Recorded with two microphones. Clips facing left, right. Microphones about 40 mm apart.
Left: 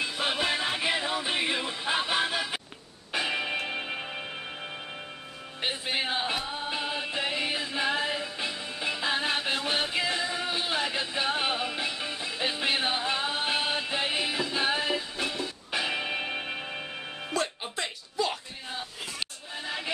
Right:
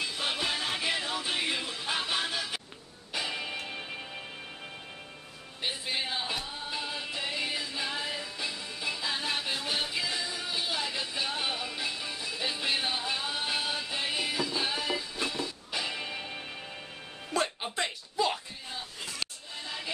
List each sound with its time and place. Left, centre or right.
0.0 s music: centre
3.1 s music: left
5.6 s music: left
17.3 s music: centre
19.1 s music: left